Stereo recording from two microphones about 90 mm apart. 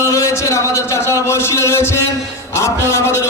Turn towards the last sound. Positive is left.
turn(degrees=30)  # may be behind; listen again after turning